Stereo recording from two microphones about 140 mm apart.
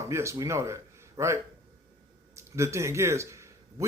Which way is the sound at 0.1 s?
20° right (ahead or behind).